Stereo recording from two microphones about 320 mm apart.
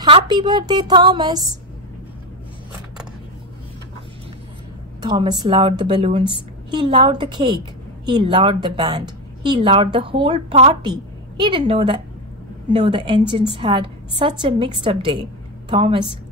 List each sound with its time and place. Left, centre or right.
0.0 s a woman's voice: centre
5.0 s a woman's voice: centre